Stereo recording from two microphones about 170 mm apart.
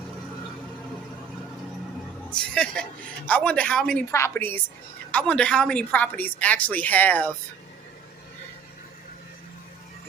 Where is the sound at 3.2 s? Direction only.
10° left (ahead or behind).